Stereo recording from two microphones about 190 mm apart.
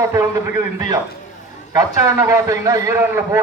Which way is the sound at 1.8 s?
15° right (ahead or behind).